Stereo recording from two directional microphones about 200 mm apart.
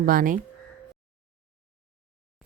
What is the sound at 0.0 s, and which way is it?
Speech, 45° right (ahead or behind).